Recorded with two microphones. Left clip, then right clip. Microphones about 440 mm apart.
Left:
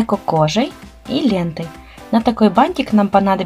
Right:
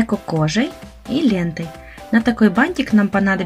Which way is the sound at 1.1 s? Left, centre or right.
Centre.